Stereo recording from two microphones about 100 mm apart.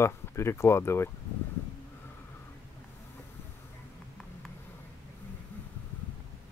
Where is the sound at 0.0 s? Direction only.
25° left (ahead or behind).